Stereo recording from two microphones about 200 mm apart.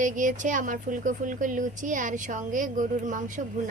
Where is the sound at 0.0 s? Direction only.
40° right (ahead or behind).